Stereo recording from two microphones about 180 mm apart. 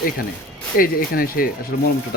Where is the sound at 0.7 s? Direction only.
55° left (ahead or behind).